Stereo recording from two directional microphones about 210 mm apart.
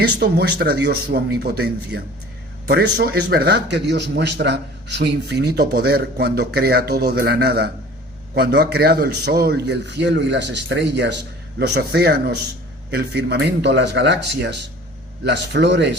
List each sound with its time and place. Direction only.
0.2 s a man's voice: 50° right (ahead or behind)